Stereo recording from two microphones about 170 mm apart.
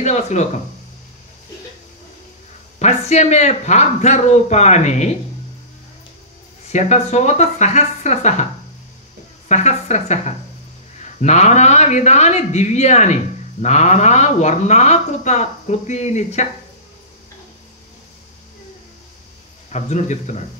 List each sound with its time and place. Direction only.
0.0 s speech: 45° left (ahead or behind)
2.8 s a man's voice: 40° left (ahead or behind)
6.7 s speech: 40° left (ahead or behind)
9.5 s a man's voice: 40° left (ahead or behind)
19.7 s a man's voice: 45° left (ahead or behind)